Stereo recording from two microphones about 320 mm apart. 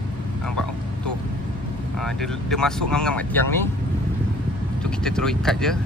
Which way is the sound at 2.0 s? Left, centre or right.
Centre.